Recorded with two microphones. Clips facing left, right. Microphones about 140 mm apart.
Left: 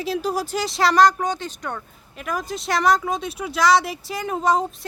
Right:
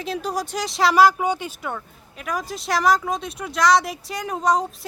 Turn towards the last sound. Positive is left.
turn(degrees=0)  # may be behind; listen again after turning